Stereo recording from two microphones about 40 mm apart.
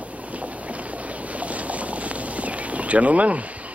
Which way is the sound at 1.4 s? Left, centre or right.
Right.